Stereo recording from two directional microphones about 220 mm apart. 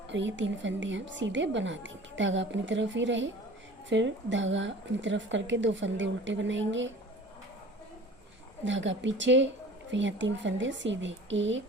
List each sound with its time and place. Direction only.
0.1 s a woman's voice: 55° right (ahead or behind)
8.6 s a woman's voice: 55° right (ahead or behind)